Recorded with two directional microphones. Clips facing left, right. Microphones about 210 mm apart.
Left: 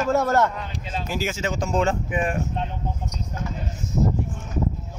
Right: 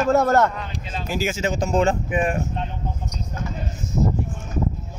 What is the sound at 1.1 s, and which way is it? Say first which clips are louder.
Speech: right 4 dB; 10° right (ahead or behind).